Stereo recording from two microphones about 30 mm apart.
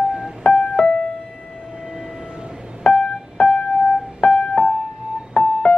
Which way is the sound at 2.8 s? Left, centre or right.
Left.